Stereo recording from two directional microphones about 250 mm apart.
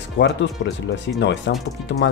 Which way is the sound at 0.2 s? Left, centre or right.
Left.